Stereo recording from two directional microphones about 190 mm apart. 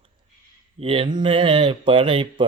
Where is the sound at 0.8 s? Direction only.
30° right (ahead or behind).